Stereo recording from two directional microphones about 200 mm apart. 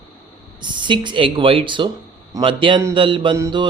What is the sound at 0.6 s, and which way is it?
Speech, 25° right (ahead or behind).